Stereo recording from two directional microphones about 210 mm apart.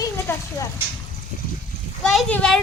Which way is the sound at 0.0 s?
15° left (ahead or behind).